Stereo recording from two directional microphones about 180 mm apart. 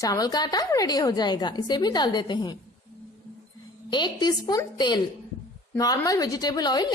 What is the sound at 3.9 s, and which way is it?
A woman's voice, 25° left (ahead or behind).